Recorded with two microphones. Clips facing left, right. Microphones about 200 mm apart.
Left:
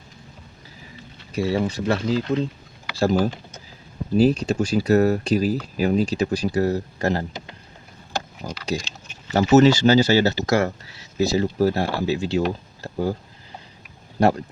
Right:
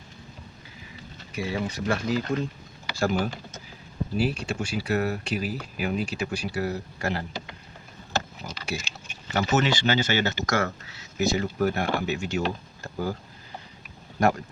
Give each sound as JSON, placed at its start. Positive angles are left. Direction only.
{"t": 1.3, "sound": "speech", "side_deg": 35}
{"t": 4.2, "sound": "speech", "side_deg": 40}
{"t": 8.7, "sound": "speech", "side_deg": 40}
{"t": 12.8, "sound": "a sound", "side_deg": 30}
{"t": 14.2, "sound": "speech", "side_deg": 30}